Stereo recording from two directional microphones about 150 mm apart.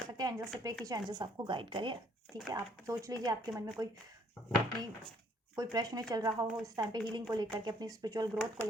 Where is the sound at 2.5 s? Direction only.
20° right (ahead or behind).